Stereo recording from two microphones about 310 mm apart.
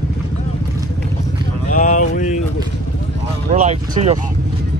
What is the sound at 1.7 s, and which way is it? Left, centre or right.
Speech, left.